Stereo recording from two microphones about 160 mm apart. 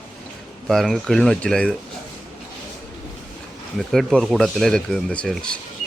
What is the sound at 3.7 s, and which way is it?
Speech, centre (ahead or behind).